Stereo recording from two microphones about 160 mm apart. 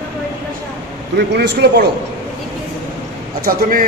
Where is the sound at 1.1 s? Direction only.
90° right.